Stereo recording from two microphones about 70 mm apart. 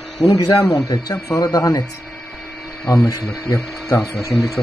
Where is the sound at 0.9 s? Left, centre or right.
Left.